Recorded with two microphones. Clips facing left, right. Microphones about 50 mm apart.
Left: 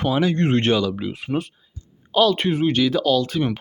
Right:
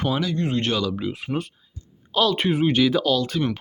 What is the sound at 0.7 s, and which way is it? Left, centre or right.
Speech, centre.